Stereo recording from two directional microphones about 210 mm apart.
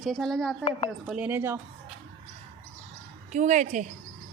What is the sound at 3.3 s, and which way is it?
Speech, 35° right (ahead or behind).